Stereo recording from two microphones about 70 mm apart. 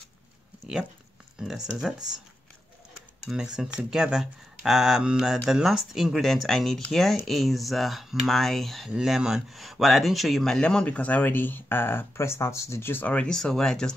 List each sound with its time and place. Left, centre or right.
1.4 s speech: centre
3.3 s speech: centre; by 13.0 s left
13.0 s speech: centre